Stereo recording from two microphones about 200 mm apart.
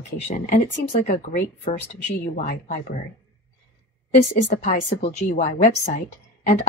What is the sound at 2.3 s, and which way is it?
Speech, 40° left (ahead or behind).